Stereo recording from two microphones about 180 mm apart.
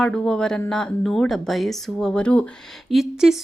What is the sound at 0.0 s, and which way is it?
Speech, 5° left (ahead or behind).